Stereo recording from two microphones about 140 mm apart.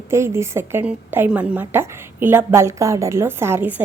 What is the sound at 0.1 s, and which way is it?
Speech, 20° right (ahead or behind).